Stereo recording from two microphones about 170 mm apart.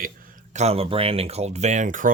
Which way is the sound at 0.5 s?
35° right (ahead or behind).